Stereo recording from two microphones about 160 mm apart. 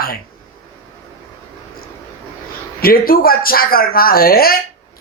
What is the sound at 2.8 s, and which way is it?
A woman's voice, 65° left (ahead or behind).